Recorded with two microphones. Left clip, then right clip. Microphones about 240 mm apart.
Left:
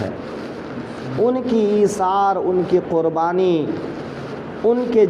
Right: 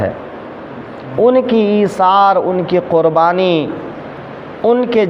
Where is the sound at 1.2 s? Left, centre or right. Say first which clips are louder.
Right 7 dB; right.